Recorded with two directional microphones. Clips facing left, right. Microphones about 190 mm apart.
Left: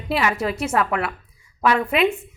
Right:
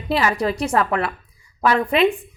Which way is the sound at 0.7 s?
35° right (ahead or behind).